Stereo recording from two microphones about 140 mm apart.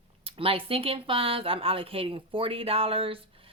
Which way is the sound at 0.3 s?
40° right (ahead or behind).